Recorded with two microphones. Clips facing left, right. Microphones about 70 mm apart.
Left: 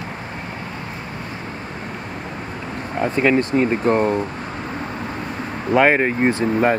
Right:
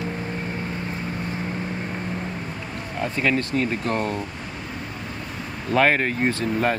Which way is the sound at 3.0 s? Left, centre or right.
Left.